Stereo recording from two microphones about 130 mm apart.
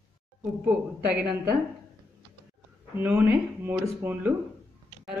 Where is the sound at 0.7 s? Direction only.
10° right (ahead or behind).